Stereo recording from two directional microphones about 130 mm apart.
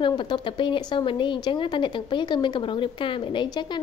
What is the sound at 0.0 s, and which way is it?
Speech, 35° left (ahead or behind).